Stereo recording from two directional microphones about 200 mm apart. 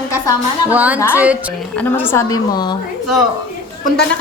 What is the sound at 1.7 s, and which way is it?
A woman's voice, 10° left (ahead or behind).